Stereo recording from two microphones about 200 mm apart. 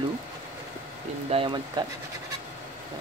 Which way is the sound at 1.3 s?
25° right (ahead or behind).